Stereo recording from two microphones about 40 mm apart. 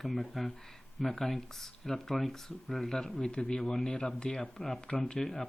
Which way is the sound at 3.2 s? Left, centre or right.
Left.